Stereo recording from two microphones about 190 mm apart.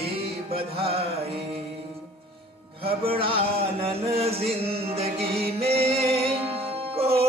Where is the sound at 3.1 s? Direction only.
30° right (ahead or behind).